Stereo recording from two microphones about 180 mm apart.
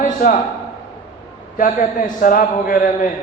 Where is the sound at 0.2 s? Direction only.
45° left (ahead or behind).